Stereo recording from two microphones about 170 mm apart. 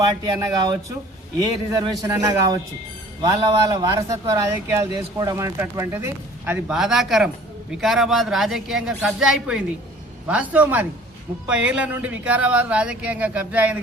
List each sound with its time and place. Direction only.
0.0 s a man's voice: 25° right (ahead or behind); by 13.7 s 10° right (ahead or behind)